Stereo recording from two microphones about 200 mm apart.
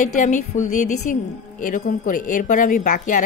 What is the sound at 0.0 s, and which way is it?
Speech, 40° left (ahead or behind).